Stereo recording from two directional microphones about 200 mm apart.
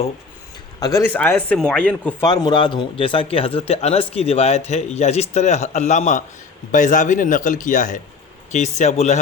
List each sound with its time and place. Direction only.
0.8 s speech: 20° left (ahead or behind)
2.2 s speech: 20° left (ahead or behind)